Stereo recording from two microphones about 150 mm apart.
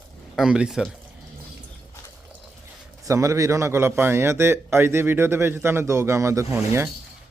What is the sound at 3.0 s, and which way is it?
A man's voice, 20° right (ahead or behind).